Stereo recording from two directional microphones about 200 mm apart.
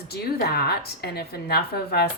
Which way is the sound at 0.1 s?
50° left (ahead or behind).